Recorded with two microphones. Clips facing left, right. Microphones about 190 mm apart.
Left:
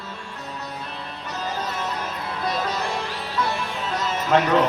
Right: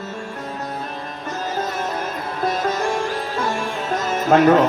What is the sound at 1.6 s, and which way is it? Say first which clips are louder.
Music: right 6 dB; 50° right (ahead or behind).